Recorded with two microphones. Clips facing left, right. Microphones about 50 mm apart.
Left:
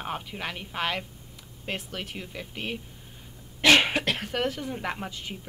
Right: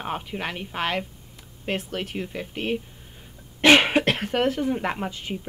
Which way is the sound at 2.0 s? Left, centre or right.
Centre.